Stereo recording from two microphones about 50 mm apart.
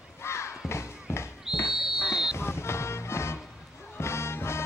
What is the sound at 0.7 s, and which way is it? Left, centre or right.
Music, left.